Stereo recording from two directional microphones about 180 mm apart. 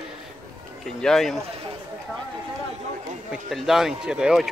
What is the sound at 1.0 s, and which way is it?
Speech, 5° left (ahead or behind).